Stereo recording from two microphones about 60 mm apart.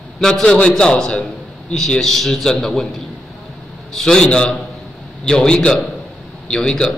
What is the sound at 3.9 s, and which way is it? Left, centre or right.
A man's voice, centre.